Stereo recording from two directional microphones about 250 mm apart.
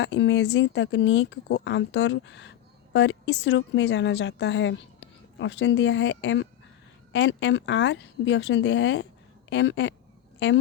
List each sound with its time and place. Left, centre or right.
0.0 s speech: left